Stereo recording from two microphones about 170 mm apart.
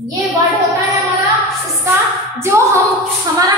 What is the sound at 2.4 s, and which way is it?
Speech, 15° right (ahead or behind).